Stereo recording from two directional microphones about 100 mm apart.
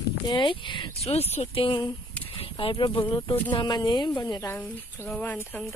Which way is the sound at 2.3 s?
65° left (ahead or behind).